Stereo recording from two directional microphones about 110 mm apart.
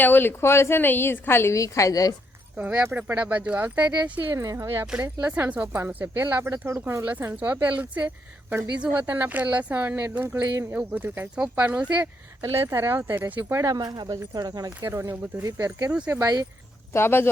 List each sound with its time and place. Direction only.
0.0 s a woman's voice: 20° left (ahead or behind)
2.6 s speech: 10° right (ahead or behind)
4.4 s speech: 25° right (ahead or behind)
13.7 s speech: 35° right (ahead or behind)
14.8 s speech: 25° right (ahead or behind)
15.9 s speech: 10° right (ahead or behind)
16.1 s speech: 35° right (ahead or behind)
16.9 s a woman's voice: 20° left (ahead or behind)